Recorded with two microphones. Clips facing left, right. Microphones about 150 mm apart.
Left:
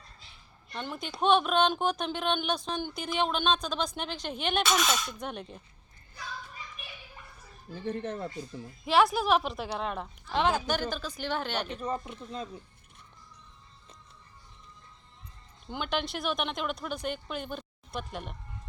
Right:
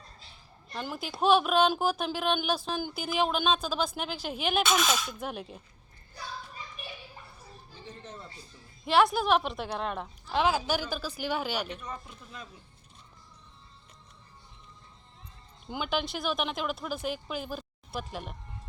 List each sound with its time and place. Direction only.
0.7 s speech: 5° right (ahead or behind)
6.8 s children playing: 35° right (ahead or behind)
7.9 s speech: 60° left (ahead or behind)
8.8 s speech: centre (ahead or behind)
11.7 s speech: 35° left (ahead or behind)
15.6 s speech: 5° right (ahead or behind)